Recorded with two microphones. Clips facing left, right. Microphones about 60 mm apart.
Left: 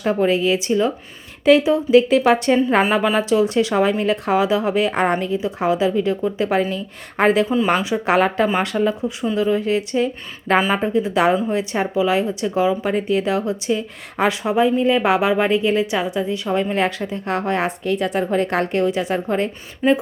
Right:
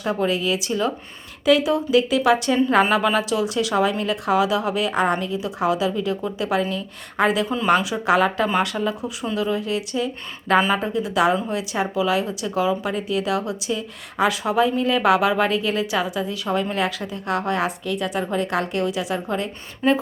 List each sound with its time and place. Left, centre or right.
0.0 s a woman's voice: left
2.9 s a woman's voice: left
7.4 s speech: centre
8.0 s a woman's voice: left
10.6 s a woman's voice: left
19.8 s speech: centre